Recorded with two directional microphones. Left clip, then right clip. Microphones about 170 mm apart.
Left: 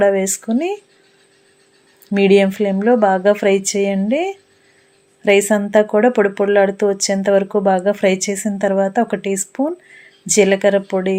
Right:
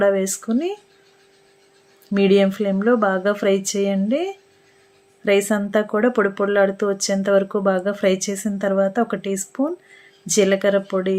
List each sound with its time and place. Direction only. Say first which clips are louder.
0.0 s speech: left 3 dB; 15° left (ahead or behind)
2.1 s speech: left 4 dB; 15° left (ahead or behind)